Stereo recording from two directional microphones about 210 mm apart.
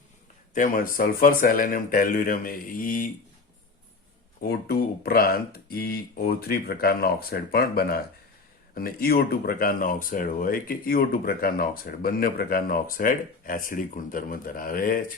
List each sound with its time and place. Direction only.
0.5 s speech: 40° left (ahead or behind)
4.4 s speech: 50° left (ahead or behind)